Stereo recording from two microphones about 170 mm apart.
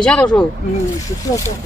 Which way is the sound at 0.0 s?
5° left (ahead or behind).